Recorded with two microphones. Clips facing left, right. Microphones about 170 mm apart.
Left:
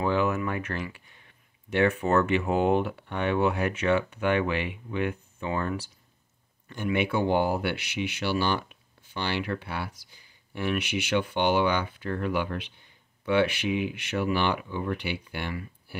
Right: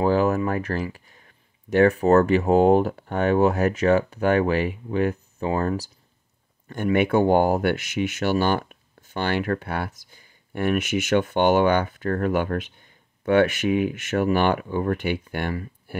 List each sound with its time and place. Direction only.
0.0 s speech: 40° right (ahead or behind)
6.7 s speech: 50° right (ahead or behind)